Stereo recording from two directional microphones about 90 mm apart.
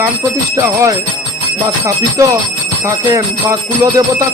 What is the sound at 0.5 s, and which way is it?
Speech, 35° right (ahead or behind).